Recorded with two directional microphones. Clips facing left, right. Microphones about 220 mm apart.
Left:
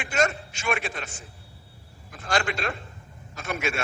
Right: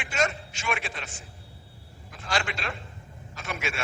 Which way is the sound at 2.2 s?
45° left (ahead or behind).